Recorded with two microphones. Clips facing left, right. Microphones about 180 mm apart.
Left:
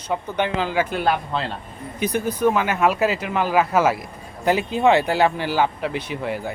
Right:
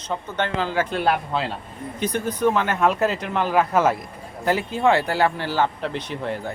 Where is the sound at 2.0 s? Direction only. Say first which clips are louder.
Left 2 dB; 10° left (ahead or behind).